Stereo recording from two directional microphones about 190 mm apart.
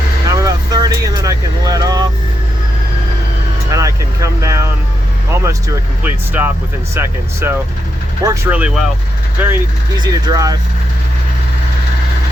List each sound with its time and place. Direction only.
0.3 s vehicle: 20° right (ahead or behind)
3.7 s speech: 15° right (ahead or behind)
10.0 s speech: 20° right (ahead or behind)